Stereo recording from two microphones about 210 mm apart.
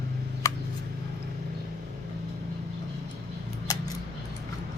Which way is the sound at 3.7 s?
15° left (ahead or behind).